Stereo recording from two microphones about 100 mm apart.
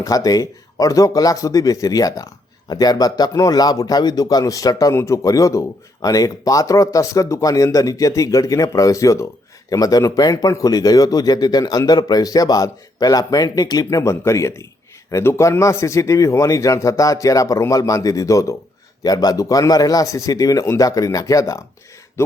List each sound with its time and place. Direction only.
0.0 s speech: 35° left (ahead or behind)